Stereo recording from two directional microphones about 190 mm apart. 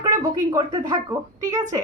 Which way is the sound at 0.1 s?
15° right (ahead or behind).